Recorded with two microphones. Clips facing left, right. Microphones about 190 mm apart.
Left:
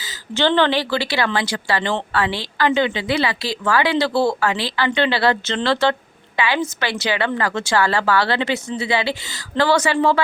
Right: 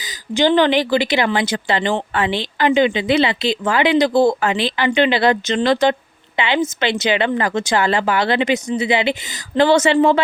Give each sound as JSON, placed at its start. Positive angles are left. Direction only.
{"t": 0.0, "sound": "speech", "side_deg": -15}